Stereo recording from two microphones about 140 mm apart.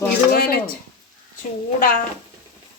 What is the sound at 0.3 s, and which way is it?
Speech, 90° left.